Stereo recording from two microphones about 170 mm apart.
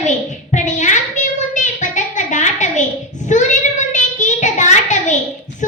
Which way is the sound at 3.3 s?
45° left (ahead or behind).